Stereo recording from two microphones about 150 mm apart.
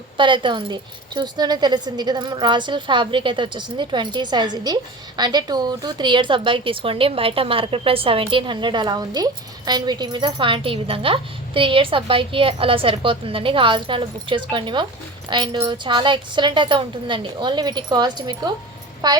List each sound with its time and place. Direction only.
0.2 s a woman's voice: 35° right (ahead or behind)